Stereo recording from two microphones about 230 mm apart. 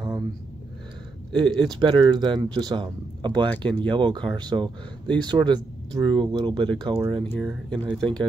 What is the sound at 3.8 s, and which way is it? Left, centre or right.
Speech, right.